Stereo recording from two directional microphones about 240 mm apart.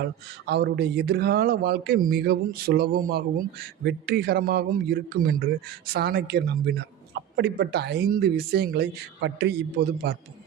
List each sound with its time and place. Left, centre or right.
0.0 s a man's voice: right